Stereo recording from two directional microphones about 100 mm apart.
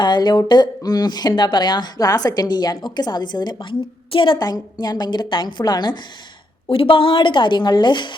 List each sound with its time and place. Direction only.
0.0 s a woman's voice: 45° left (ahead or behind)
4.4 s a woman's voice: 40° left (ahead or behind)
6.7 s a woman's voice: 65° left (ahead or behind)